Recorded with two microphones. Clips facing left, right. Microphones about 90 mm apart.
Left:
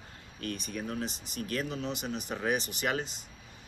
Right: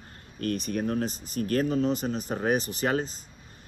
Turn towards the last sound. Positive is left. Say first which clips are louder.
# right 5 dB
turn(degrees=-35)  # may be behind; listen again after turning